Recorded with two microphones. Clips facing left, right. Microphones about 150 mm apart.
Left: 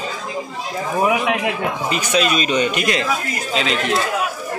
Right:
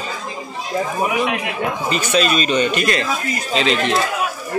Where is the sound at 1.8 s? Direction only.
15° left (ahead or behind).